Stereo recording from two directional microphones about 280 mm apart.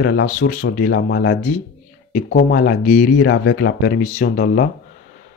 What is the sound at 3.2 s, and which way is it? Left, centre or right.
Speech, left.